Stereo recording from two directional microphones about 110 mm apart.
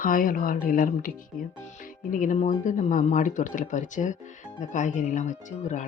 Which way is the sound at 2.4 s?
90° left.